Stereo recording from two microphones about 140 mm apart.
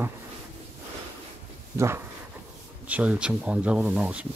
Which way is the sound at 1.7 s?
20° right (ahead or behind).